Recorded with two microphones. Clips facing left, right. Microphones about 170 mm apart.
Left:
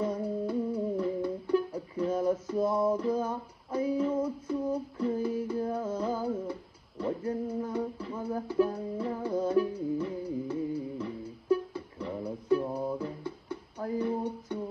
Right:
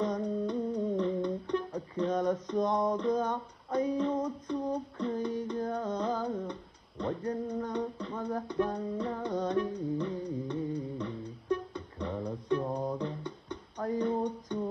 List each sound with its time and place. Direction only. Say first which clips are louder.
0.0 s music: even; 5° left (ahead or behind)
7.4 s a sound: left 1 dB; 5° left (ahead or behind)
8.2 s music: left 4 dB; 5° left (ahead or behind)